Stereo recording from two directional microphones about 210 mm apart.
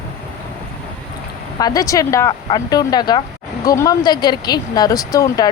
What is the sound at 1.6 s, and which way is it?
Speech, 15° left (ahead or behind).